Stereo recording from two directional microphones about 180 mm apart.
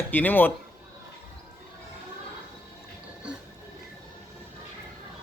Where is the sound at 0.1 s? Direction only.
10° left (ahead or behind).